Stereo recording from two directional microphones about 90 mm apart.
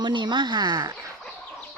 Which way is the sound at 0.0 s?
60° right (ahead or behind).